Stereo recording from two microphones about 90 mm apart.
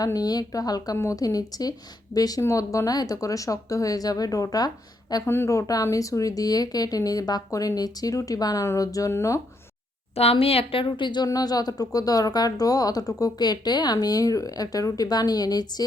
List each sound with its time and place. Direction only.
0.0 s speech: 45° left (ahead or behind)
5.2 s speech: 25° left (ahead or behind)
10.2 s a woman's voice: 90° left; by 11.3 s 55° left (ahead or behind)
11.3 s speech: 45° left (ahead or behind)